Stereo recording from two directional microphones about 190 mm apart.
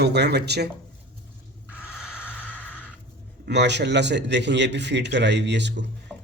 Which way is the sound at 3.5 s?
65° right (ahead or behind).